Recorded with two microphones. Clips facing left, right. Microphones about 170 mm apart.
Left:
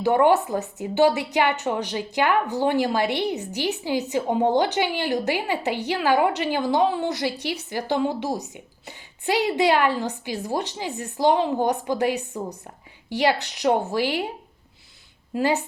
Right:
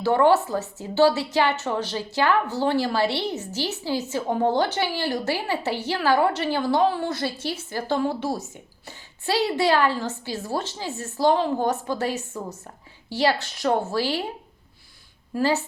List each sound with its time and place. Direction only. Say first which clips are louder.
0.0 s a woman's voice: even; 15° left (ahead or behind)
15.4 s a woman's voice: even; 15° left (ahead or behind)